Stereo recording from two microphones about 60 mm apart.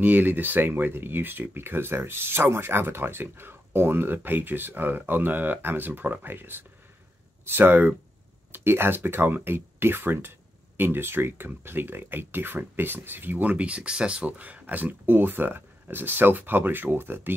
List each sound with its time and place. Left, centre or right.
0.0 s speech: right
13.5 s speech: right